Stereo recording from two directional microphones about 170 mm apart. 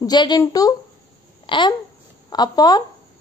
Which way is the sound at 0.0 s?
25° left (ahead or behind).